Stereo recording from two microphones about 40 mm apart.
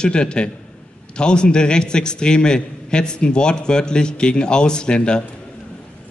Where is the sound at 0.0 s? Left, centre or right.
Left.